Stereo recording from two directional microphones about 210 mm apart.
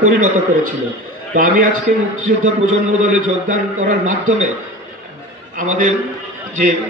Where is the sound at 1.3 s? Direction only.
40° right (ahead or behind).